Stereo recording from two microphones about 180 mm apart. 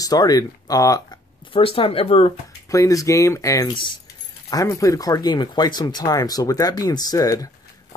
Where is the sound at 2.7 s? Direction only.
20° left (ahead or behind).